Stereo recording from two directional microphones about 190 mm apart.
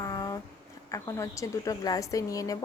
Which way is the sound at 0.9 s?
15° left (ahead or behind).